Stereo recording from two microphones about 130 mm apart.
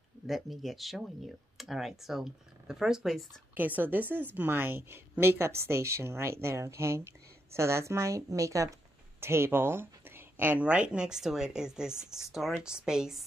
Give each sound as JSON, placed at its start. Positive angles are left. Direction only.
{"t": 0.3, "sound": "speech", "side_deg": 0}
{"t": 3.5, "sound": "a woman's voice", "side_deg": -15}